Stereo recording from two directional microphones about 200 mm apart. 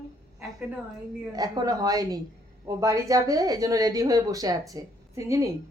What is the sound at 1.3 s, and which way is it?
Speech, 20° right (ahead or behind).